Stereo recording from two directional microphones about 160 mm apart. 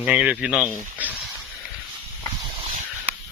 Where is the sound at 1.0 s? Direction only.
10° right (ahead or behind).